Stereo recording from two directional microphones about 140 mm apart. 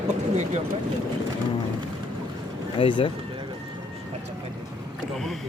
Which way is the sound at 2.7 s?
40° left (ahead or behind).